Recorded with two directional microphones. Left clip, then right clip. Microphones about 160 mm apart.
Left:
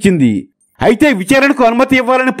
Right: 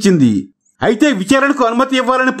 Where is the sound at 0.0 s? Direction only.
15° left (ahead or behind).